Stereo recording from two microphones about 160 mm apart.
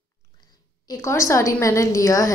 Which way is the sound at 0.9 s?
15° left (ahead or behind).